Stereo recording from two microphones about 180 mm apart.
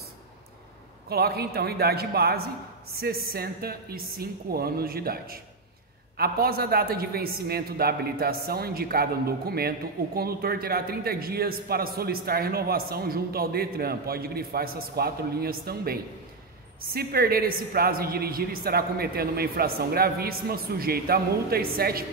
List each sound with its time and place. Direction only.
1.0 s a man's voice: 60° right (ahead or behind)